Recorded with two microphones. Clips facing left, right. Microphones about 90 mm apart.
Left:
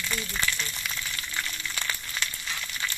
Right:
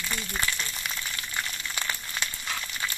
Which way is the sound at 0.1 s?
25° right (ahead or behind).